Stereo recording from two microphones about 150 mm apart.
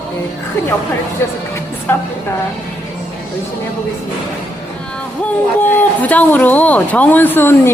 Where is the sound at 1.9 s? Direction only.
15° left (ahead or behind).